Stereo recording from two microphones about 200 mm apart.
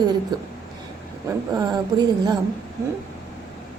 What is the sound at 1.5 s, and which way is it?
Speech, 20° right (ahead or behind).